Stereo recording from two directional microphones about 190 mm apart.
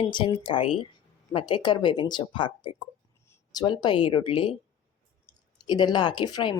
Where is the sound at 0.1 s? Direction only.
25° left (ahead or behind).